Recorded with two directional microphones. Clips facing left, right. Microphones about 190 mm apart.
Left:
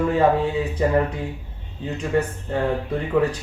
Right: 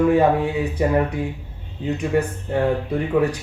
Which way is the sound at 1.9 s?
10° right (ahead or behind).